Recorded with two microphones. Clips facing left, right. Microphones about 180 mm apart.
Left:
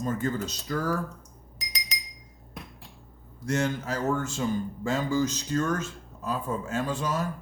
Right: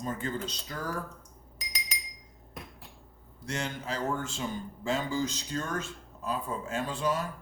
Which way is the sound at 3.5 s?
45° left (ahead or behind).